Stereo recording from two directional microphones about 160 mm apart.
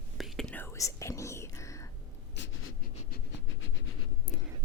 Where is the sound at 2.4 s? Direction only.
90° left.